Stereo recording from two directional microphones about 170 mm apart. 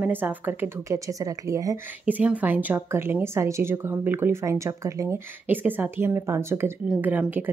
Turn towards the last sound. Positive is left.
turn(degrees=-10)  # may be behind; listen again after turning